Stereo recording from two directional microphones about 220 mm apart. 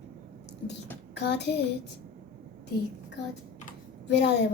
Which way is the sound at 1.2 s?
50° left (ahead or behind).